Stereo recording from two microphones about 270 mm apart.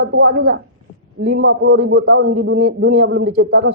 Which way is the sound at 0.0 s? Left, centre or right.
Right.